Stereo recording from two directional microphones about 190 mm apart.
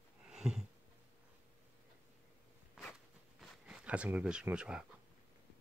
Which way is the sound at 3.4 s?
5° right (ahead or behind).